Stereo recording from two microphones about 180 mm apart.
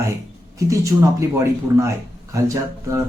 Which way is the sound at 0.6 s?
15° right (ahead or behind).